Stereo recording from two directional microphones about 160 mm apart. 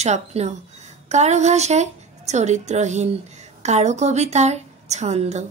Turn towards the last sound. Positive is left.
turn(degrees=-45)  # may be behind; listen again after turning